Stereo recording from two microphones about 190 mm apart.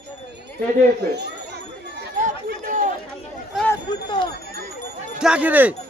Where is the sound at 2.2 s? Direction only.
45° right (ahead or behind).